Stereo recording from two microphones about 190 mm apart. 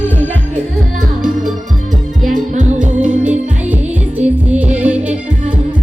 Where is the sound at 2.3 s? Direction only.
40° right (ahead or behind).